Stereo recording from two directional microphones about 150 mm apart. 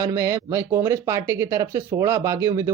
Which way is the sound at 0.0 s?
20° right (ahead or behind).